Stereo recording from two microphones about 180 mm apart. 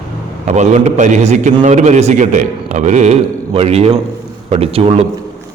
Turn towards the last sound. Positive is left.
turn(degrees=-35)  # may be behind; listen again after turning